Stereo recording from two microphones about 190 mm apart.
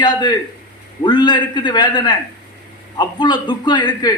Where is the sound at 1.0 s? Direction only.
25° left (ahead or behind).